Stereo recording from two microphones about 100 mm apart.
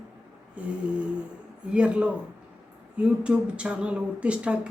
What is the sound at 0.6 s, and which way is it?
Speech, 10° right (ahead or behind).